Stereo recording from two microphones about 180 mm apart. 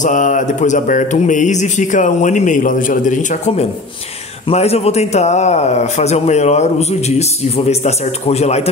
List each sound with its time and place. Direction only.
0.0 s a man's voice: 45° left (ahead or behind)